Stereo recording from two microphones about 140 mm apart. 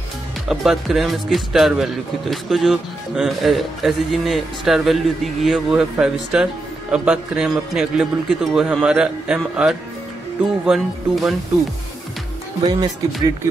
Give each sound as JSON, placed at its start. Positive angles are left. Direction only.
{"t": 0.5, "sound": "speech", "side_deg": 0}
{"t": 12.6, "sound": "speech", "side_deg": -25}